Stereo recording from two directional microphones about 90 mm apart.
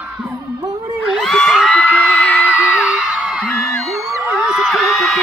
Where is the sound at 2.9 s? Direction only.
10° right (ahead or behind).